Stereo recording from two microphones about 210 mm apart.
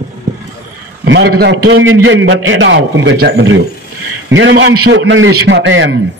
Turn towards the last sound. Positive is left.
turn(degrees=-60)  # may be behind; listen again after turning